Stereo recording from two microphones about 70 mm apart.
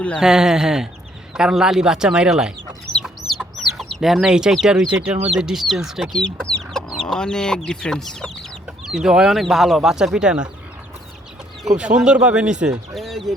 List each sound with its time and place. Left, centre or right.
0.2 s speech: centre
3.2 s chicken: centre
4.6 s speech: centre
4.9 s speech: centre
5.3 s speech: centre
8.8 s speech: centre
11.8 s speech: centre
12.9 s bird: centre